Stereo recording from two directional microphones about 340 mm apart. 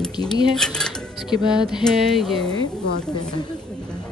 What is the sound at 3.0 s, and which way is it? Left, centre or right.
Speech, centre.